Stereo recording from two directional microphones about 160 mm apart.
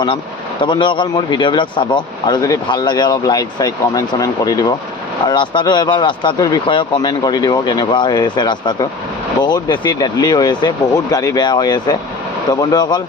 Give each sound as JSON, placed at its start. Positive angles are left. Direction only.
{"t": 0.6, "sound": "speech", "side_deg": 30}